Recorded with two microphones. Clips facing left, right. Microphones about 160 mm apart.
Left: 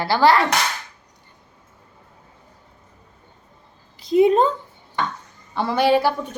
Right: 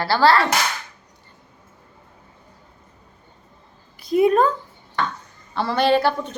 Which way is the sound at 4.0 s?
20° left (ahead or behind).